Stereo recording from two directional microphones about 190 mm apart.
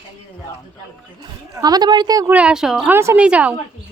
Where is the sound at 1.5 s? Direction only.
20° right (ahead or behind).